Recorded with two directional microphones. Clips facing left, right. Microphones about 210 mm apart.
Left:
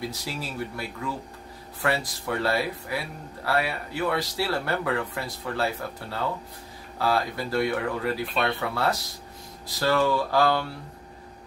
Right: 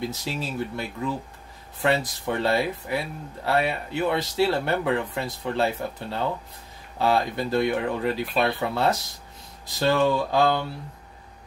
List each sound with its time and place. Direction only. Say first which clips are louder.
0.1 s speech: right 3 dB; 20° right (ahead or behind)